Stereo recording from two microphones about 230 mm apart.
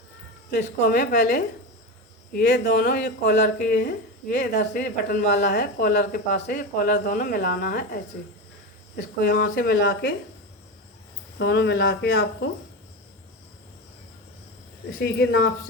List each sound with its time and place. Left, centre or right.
0.5 s speech: left
11.3 s speech: left
14.9 s speech: left